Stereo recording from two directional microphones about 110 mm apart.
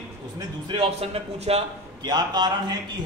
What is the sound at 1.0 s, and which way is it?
Speech, 70° right (ahead or behind).